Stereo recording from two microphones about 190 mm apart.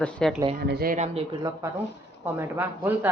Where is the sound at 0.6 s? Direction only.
55° right (ahead or behind).